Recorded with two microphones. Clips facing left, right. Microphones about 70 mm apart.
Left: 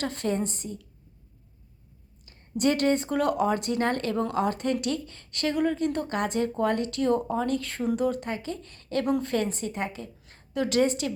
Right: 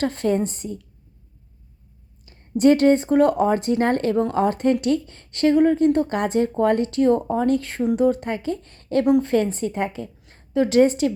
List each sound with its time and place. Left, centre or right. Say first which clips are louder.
0.0 s a woman's voice: right 7 dB; right
2.2 s a woman's voice: right 9 dB; right